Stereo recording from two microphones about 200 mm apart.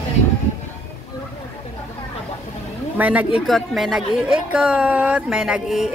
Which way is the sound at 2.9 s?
5° right (ahead or behind).